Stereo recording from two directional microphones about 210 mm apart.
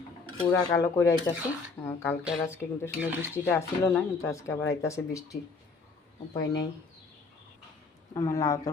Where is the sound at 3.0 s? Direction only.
10° right (ahead or behind).